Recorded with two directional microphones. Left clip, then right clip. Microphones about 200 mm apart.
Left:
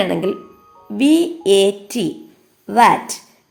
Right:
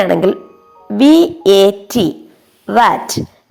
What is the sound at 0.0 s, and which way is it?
Speech, 25° right (ahead or behind).